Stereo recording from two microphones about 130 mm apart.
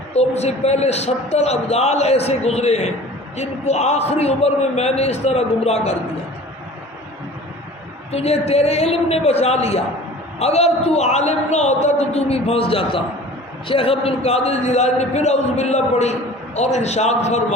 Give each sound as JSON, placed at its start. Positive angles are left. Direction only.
{"t": 0.1, "sound": "a man's voice", "side_deg": 55}
{"t": 8.1, "sound": "a woman's voice", "side_deg": 55}